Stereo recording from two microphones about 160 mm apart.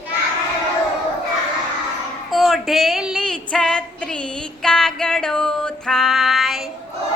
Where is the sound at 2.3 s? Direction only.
Centre (ahead or behind).